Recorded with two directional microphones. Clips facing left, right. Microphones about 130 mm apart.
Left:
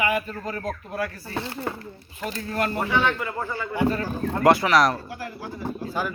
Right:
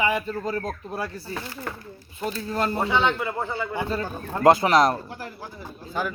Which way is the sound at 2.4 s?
20° right (ahead or behind).